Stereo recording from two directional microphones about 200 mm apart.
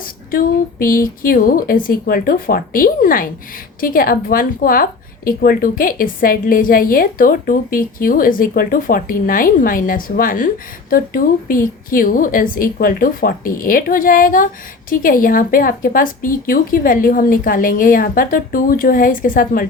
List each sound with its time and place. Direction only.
0.3 s a woman's voice: 45° left (ahead or behind)